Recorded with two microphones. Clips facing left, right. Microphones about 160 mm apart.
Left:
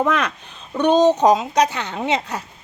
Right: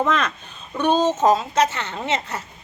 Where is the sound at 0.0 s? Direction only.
10° left (ahead or behind).